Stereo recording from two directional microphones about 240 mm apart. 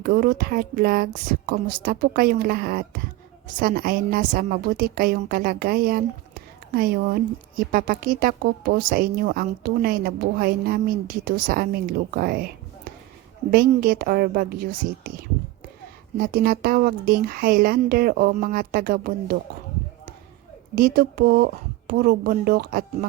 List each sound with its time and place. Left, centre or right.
0.0 s a woman's voice: right
13.5 s a woman's voice: right
20.7 s a woman's voice: right